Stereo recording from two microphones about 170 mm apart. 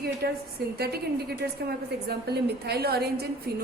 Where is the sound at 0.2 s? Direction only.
70° right (ahead or behind).